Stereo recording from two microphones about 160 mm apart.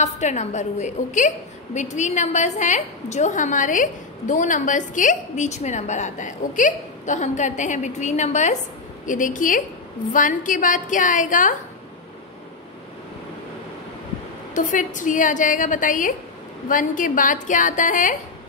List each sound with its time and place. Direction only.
0.0 s a woman's voice: 45° left (ahead or behind)
14.5 s a woman's voice: 55° left (ahead or behind)